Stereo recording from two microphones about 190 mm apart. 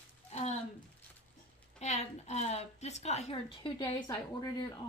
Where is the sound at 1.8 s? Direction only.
35° left (ahead or behind); by 4.7 s 20° left (ahead or behind).